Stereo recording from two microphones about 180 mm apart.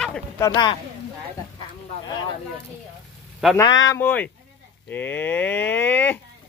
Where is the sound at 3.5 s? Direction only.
20° left (ahead or behind).